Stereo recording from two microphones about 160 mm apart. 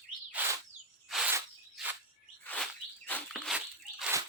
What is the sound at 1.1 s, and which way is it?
Bird vocalization, centre (ahead or behind).